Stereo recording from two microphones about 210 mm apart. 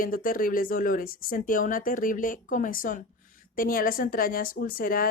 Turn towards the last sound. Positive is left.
turn(degrees=45)  # may be behind; listen again after turning